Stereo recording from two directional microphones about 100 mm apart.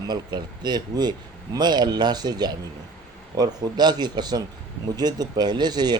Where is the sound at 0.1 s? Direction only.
45° right (ahead or behind).